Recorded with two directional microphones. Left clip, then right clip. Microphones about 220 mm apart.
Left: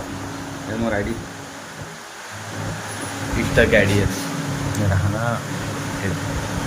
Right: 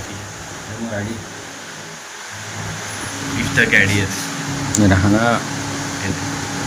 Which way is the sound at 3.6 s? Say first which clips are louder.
Right 1 dB; 25° left (ahead or behind).